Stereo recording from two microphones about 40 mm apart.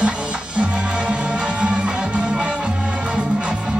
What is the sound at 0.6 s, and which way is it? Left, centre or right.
Music, right.